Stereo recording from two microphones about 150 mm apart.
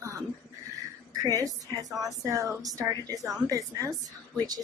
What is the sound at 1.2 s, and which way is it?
A woman's voice, 25° right (ahead or behind).